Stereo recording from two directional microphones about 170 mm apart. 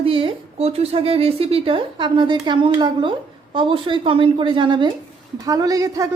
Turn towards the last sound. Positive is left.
turn(degrees=-20)  # may be behind; listen again after turning